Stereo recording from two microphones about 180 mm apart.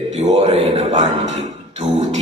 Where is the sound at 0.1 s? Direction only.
40° right (ahead or behind).